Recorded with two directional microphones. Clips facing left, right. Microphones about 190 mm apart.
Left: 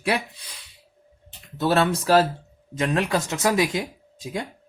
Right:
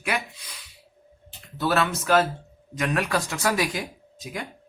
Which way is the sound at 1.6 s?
30° left (ahead or behind).